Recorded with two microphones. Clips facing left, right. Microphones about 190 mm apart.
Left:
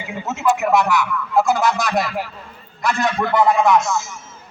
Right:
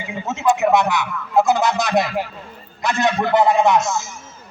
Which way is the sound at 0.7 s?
20° right (ahead or behind).